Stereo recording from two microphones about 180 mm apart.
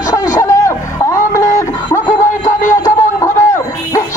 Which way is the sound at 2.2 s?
45° left (ahead or behind).